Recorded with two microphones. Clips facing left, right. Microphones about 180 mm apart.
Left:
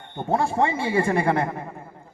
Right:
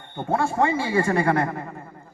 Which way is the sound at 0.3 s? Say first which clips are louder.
Even; 20° left (ahead or behind).